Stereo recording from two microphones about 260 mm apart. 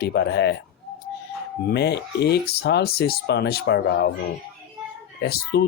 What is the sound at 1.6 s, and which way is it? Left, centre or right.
Speech, left.